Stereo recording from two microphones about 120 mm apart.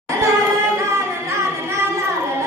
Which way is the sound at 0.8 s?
25° right (ahead or behind).